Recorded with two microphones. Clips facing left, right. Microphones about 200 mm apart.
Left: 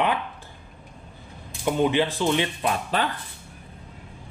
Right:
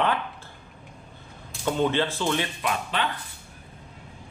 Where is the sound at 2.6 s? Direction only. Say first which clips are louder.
Left 3 dB; 35° left (ahead or behind).